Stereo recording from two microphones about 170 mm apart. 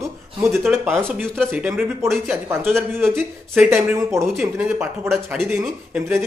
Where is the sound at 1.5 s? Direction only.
10° right (ahead or behind).